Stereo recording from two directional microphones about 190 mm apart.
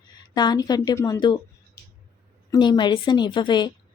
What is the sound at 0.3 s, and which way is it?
A woman's voice, 20° left (ahead or behind).